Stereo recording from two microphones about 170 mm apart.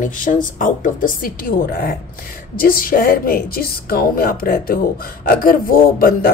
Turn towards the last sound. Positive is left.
turn(degrees=60)  # may be behind; listen again after turning